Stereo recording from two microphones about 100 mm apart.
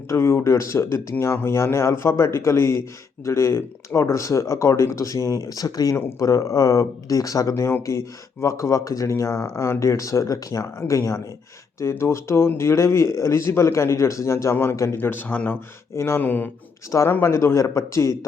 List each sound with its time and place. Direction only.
0.1 s speech: 30° left (ahead or behind)
6.0 s speech: 25° left (ahead or behind)